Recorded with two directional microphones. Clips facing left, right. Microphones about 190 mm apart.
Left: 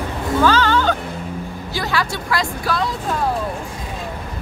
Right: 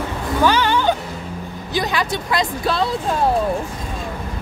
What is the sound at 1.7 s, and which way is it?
Speech, 20° right (ahead or behind).